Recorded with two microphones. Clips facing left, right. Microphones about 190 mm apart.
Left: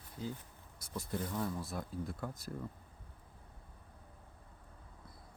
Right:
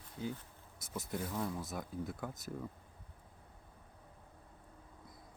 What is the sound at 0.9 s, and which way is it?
Speech, 5° right (ahead or behind).